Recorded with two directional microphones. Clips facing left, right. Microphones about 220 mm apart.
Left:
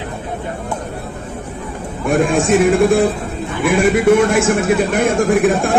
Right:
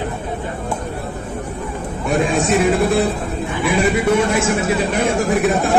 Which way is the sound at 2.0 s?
50° left (ahead or behind).